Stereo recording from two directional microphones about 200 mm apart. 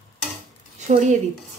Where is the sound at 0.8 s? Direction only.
35° right (ahead or behind).